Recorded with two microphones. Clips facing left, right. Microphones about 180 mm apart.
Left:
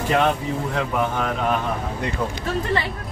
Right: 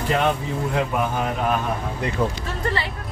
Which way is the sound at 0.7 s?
10° right (ahead or behind).